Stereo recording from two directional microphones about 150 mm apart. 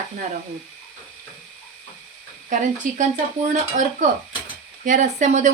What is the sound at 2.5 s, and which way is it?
Speech, 60° right (ahead or behind).